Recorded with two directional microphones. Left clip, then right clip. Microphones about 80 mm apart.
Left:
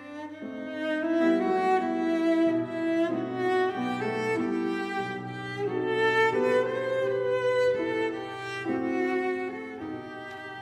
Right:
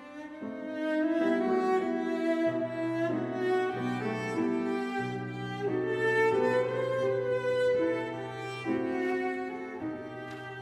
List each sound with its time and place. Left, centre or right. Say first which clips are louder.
0.7 s music: left 2 dB; left